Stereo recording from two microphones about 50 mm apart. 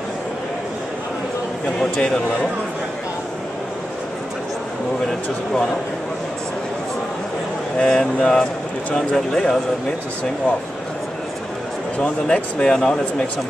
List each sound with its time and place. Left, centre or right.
2.0 s speech: centre
7.8 s speech: centre
12.3 s speech: centre